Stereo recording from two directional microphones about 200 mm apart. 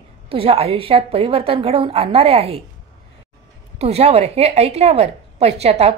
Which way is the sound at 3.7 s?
30° right (ahead or behind).